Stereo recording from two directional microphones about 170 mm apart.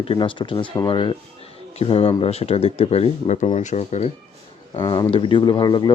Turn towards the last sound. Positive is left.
turn(degrees=25)  # may be behind; listen again after turning